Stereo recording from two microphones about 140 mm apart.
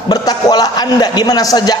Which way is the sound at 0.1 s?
30° left (ahead or behind).